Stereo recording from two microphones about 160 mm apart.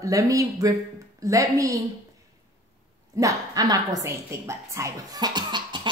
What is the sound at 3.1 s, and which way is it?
A woman's voice, 20° right (ahead or behind).